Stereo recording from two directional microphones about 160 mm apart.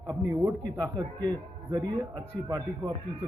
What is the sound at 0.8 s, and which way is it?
A man's voice, 25° right (ahead or behind).